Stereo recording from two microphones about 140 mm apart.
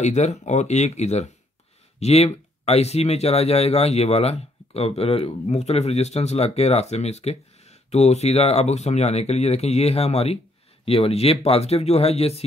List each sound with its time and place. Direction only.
0.0 s speech: 55° left (ahead or behind)